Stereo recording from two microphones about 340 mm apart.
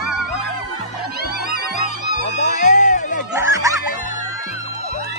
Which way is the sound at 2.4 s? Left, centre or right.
Left.